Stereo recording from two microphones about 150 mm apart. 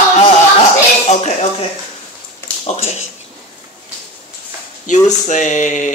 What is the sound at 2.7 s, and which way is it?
Speech, 45° left (ahead or behind).